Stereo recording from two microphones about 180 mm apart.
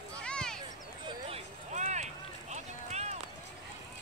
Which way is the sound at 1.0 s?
35° right (ahead or behind).